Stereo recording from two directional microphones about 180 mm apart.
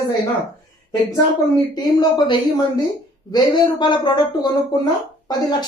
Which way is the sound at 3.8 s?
25° left (ahead or behind).